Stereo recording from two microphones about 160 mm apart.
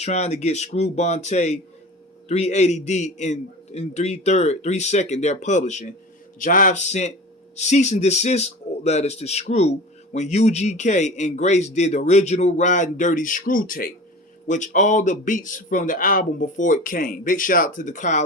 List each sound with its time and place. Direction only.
0.0 s speech: 45° left (ahead or behind); by 13.9 s 65° left (ahead or behind)
14.4 s a man's voice: 50° left (ahead or behind)